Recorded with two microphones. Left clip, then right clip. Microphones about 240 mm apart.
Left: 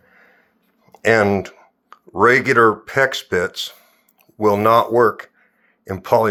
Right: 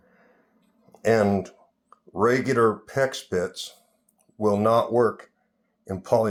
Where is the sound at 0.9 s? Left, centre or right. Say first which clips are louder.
Left 6 dB; centre.